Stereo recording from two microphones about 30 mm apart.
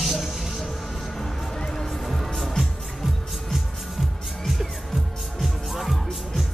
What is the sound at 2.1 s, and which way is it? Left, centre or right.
Music, centre.